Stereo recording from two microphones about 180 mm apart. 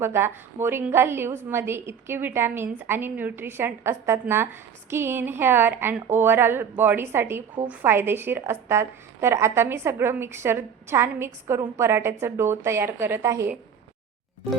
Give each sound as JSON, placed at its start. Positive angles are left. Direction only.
{"t": 0.0, "sound": "a woman's voice", "side_deg": -15}